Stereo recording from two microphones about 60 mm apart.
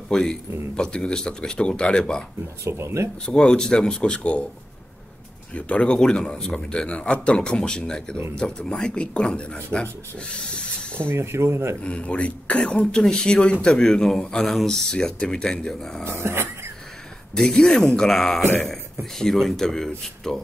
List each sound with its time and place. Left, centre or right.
0.1 s speech: centre
2.6 s speech: right
3.3 s speech: centre
5.5 s speech: centre
11.1 s speech: right
11.8 s speech: centre
16.1 s dog: right
17.4 s speech: centre